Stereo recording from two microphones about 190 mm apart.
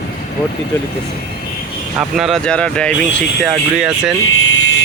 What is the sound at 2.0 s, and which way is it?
Speech, centre (ahead or behind).